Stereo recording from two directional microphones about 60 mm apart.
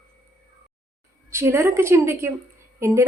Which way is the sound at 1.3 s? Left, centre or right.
Right.